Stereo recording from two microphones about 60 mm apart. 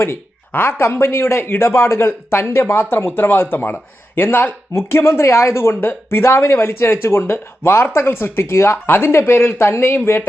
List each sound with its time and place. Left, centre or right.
0.0 s speech: left